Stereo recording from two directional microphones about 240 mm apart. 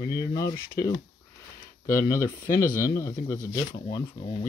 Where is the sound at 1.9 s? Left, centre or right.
Centre.